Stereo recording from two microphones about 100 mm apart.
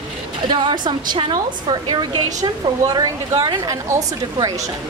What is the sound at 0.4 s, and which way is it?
A woman's voice, 55° right (ahead or behind).